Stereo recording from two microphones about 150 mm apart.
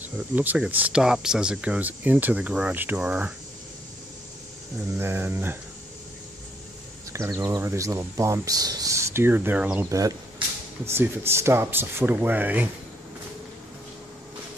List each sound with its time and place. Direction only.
0.0 s speech: 10° right (ahead or behind)
4.9 s speech: 15° right (ahead or behind)
7.1 s speech: 20° right (ahead or behind)
9.8 s speech: 20° right (ahead or behind)